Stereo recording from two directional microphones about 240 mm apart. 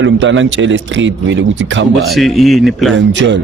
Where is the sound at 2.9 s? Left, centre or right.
Right.